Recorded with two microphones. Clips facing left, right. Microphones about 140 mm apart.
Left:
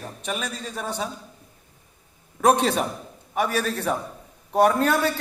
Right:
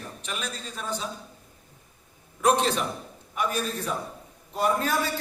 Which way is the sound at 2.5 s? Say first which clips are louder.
Left 3 dB; 55° left (ahead or behind).